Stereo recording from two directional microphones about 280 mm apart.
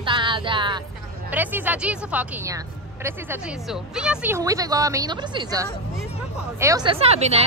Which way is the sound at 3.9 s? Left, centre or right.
Centre.